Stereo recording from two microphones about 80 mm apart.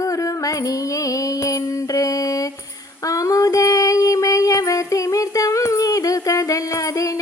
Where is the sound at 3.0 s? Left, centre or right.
Left.